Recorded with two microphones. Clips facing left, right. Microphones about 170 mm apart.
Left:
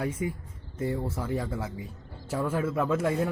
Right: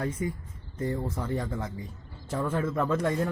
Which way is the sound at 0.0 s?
10° left (ahead or behind).